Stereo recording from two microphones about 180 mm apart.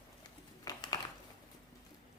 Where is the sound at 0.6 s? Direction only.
20° left (ahead or behind).